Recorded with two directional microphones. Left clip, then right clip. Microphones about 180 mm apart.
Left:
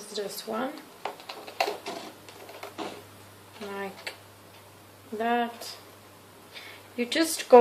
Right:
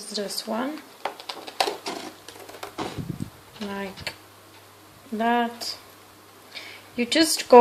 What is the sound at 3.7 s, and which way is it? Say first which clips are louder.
Speech: right 3 dB; 45° right (ahead or behind).